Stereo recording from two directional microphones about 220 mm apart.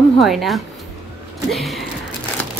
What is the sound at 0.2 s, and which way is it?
A woman's voice, centre (ahead or behind).